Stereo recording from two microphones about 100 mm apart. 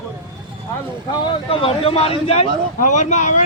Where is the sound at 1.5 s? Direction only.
65° left (ahead or behind).